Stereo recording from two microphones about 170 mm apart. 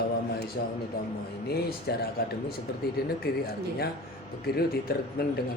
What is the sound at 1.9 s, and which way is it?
Speech, 70° left (ahead or behind).